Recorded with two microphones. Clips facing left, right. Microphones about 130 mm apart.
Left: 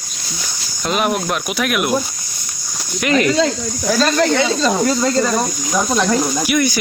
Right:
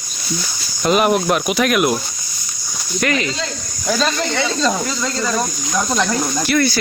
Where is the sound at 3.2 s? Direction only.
60° left (ahead or behind).